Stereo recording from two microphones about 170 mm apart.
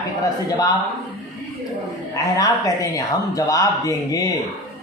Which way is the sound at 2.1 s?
20° left (ahead or behind).